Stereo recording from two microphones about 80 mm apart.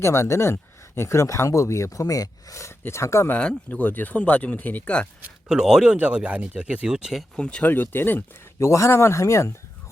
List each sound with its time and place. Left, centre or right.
0.0 s speech: left
3.3 s speech: centre
5.5 s speech: centre
7.3 s speech: centre
7.7 s speech: left
8.5 s speech: left